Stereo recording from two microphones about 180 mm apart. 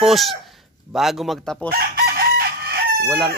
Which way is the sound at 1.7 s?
55° right (ahead or behind).